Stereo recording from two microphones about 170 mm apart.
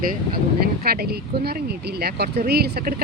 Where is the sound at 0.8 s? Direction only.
65° right (ahead or behind).